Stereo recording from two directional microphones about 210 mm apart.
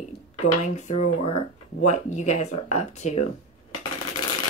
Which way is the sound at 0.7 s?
35° left (ahead or behind).